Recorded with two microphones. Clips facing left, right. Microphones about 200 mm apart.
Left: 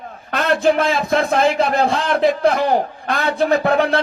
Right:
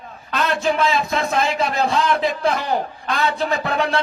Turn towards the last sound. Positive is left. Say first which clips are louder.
# left 6 dB
turn(degrees=55)  # may be behind; listen again after turning